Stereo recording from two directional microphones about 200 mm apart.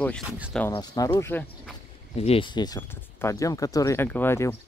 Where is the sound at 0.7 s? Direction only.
20° left (ahead or behind).